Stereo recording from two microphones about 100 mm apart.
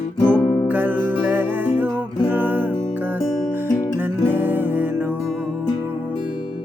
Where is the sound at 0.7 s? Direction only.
15° right (ahead or behind).